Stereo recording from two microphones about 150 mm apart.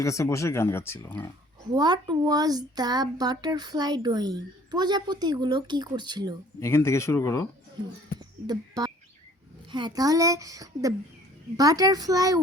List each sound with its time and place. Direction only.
0.0 s speech: 20° left (ahead or behind)
1.7 s speech: 30° right (ahead or behind)
6.6 s speech: 20° left (ahead or behind)
8.2 s a sound: 25° right (ahead or behind)
9.7 s speech: 30° right (ahead or behind)